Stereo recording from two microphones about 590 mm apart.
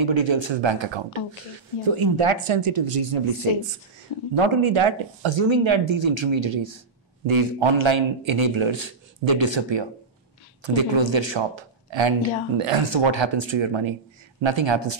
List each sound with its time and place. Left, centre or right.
0.0 s speech: right
4.4 s speech: right